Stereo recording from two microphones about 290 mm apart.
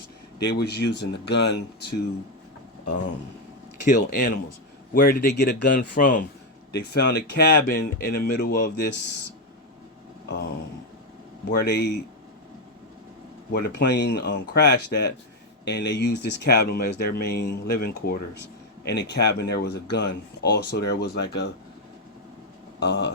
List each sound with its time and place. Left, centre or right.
0.3 s speech: left
3.8 s speech: left
10.2 s a sound: left
11.6 s speech: left
13.5 s speech: left
22.8 s speech: left